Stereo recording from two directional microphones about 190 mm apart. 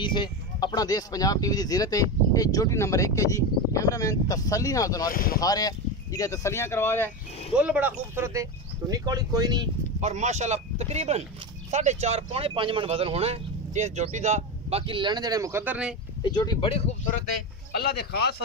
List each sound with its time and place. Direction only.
0.0 s speech: 25° left (ahead or behind)
5.1 s speech: 50° left (ahead or behind)
5.4 s speech: 20° left (ahead or behind)
7.5 s speech: 10° right (ahead or behind)
9.9 s speech: 35° right (ahead or behind); by 16.0 s 5° right (ahead or behind)
16.2 s speech: 20° left (ahead or behind); by 17.2 s 40° left (ahead or behind)
17.7 s speech: 55° left (ahead or behind)